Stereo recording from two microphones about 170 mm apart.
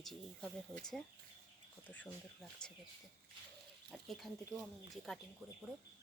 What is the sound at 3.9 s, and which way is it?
Speech, centre (ahead or behind).